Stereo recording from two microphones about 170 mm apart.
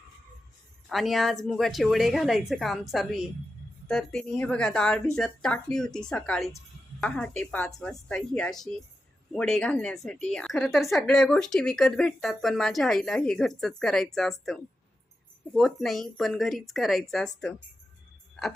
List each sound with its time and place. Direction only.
0.9 s speech: centre (ahead or behind)